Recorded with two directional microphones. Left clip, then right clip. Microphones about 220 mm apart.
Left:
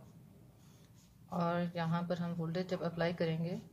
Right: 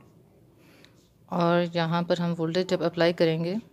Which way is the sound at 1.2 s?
50° right (ahead or behind).